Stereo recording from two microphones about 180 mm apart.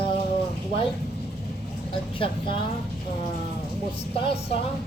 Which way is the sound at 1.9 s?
30° left (ahead or behind).